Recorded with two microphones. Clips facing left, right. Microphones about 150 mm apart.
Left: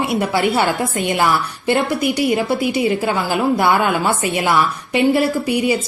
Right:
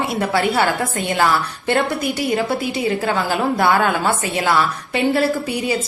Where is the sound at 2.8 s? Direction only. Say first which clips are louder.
Left 1 dB; 20° left (ahead or behind).